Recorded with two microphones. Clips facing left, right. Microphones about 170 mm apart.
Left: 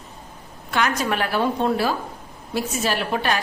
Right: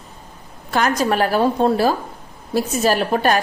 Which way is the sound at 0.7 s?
40° right (ahead or behind).